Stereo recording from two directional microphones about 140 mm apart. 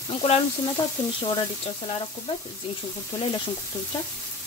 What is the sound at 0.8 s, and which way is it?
Frying, 25° left (ahead or behind).